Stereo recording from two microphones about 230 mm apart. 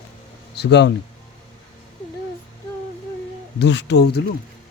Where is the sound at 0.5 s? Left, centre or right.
Left.